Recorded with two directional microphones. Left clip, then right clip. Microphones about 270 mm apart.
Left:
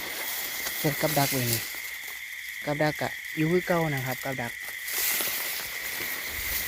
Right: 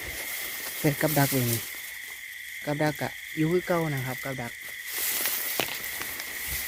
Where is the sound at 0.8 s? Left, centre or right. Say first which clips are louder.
Right 1 dB; right.